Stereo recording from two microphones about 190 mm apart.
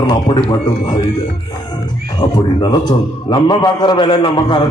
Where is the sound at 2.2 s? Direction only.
25° left (ahead or behind).